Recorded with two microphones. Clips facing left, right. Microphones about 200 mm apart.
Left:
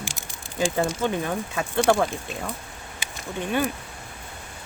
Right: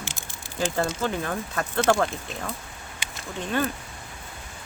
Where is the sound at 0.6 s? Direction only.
10° left (ahead or behind).